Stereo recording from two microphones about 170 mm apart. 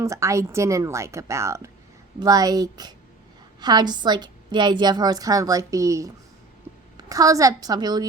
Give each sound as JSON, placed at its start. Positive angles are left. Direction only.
{"t": 0.0, "sound": "a woman's voice", "side_deg": -20}